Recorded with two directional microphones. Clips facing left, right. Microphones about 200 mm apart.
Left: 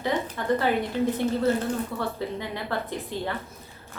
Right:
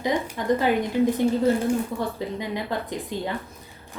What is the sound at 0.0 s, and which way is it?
A woman's voice, 15° right (ahead or behind).